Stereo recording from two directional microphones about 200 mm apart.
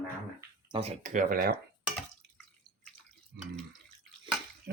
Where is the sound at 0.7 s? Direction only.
30° right (ahead or behind).